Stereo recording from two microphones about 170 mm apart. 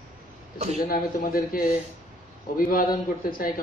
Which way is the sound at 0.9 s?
55° left (ahead or behind).